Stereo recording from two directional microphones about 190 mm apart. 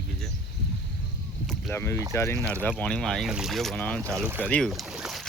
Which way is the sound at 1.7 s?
15° left (ahead or behind).